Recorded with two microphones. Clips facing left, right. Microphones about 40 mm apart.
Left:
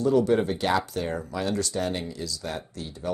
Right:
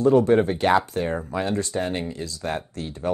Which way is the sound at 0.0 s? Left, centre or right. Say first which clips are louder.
Right 4 dB; right.